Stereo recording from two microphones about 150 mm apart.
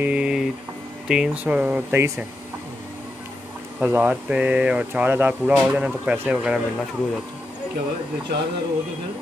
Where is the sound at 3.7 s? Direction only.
10° right (ahead or behind).